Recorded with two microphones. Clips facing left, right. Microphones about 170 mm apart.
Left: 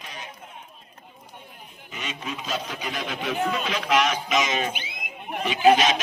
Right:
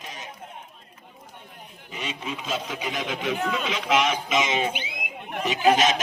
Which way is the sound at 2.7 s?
10° right (ahead or behind).